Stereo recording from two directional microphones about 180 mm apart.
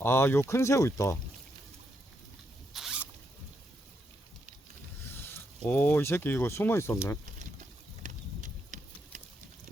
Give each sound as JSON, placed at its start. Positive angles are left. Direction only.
{"t": 0.0, "sound": "speech", "side_deg": 10}
{"t": 2.7, "sound": "zipper", "side_deg": -5}
{"t": 5.0, "sound": "speech", "side_deg": 15}
{"t": 8.0, "sound": "a sound", "side_deg": -45}